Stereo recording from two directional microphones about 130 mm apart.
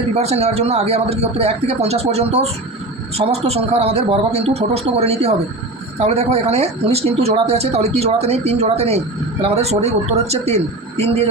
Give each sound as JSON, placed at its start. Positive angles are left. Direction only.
{"t": 0.1, "sound": "speech", "side_deg": -55}